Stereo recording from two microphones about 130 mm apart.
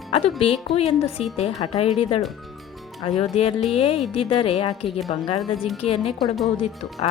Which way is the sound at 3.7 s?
45° left (ahead or behind).